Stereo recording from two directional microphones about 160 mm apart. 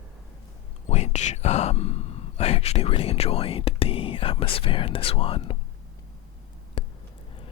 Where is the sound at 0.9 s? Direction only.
45° left (ahead or behind).